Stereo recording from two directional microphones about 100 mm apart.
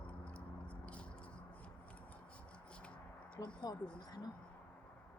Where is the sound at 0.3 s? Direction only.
15° left (ahead or behind).